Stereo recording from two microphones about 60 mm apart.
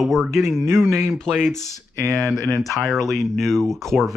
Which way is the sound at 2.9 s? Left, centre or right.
Centre.